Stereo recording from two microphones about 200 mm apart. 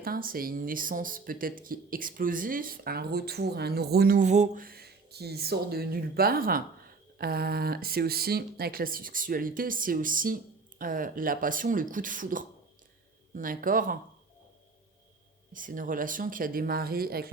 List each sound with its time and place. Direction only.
0.0 s speech: 45° right (ahead or behind)
15.5 s speech: 40° right (ahead or behind)